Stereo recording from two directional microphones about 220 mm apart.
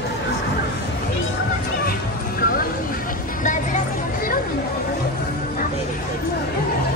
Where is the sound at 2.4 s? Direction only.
40° left (ahead or behind).